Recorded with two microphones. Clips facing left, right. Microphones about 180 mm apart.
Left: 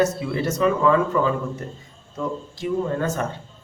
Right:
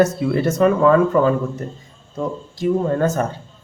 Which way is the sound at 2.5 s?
45° right (ahead or behind).